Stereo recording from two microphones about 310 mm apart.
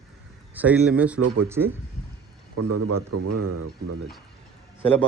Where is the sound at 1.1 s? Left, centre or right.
Right.